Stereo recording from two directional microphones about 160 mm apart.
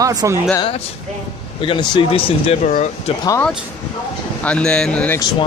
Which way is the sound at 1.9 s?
35° left (ahead or behind).